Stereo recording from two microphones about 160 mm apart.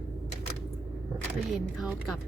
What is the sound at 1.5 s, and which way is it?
Speech, centre (ahead or behind).